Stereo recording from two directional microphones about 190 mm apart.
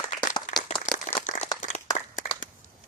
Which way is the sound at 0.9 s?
40° left (ahead or behind).